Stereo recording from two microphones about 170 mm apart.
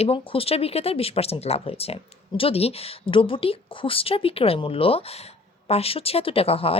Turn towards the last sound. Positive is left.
turn(degrees=35)  # may be behind; listen again after turning